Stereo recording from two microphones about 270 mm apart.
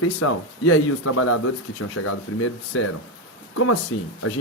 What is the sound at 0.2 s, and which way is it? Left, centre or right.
Speech, left.